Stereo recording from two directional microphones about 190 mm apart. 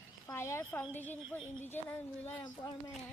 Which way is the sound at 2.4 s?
25° left (ahead or behind).